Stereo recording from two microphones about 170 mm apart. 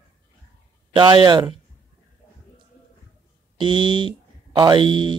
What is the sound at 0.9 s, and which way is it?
Speech, 25° right (ahead or behind).